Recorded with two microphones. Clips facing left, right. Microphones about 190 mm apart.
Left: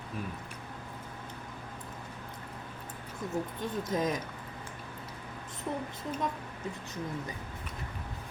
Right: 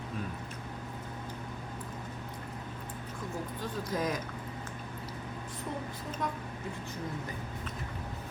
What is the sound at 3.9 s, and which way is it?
Speech, 20° left (ahead or behind).